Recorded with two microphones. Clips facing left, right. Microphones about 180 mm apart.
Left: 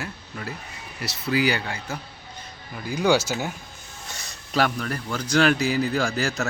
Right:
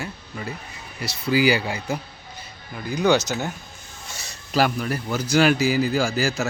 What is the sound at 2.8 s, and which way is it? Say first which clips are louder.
Speech: right 1 dB; 10° left (ahead or behind).